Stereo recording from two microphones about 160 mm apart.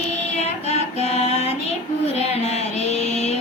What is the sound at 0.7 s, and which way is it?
Mantra, 40° left (ahead or behind).